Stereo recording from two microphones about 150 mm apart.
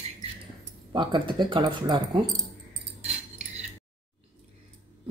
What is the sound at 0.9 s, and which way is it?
Speech, 30° right (ahead or behind).